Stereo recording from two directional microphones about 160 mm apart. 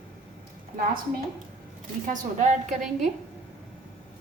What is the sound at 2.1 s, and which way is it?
Speech, 50° right (ahead or behind).